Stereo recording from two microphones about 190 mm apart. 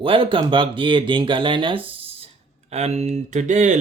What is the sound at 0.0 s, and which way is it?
Speech, 25° right (ahead or behind).